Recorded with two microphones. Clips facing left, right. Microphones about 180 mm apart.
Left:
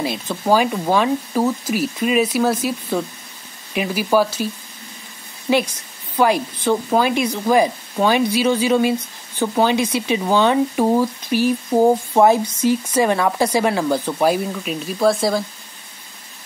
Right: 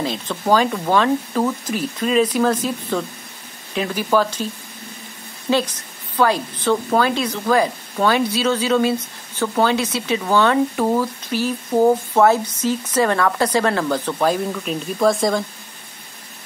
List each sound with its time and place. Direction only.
0.0 s a woman's voice: 10° left (ahead or behind)
5.5 s a woman's voice: 10° left (ahead or behind)